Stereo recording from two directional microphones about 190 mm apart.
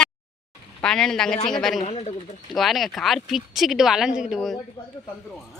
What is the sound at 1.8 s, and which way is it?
Speech, 35° left (ahead or behind).